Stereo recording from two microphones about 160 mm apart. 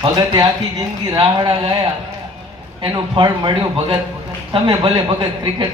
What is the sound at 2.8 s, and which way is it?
A man's voice, 30° right (ahead or behind).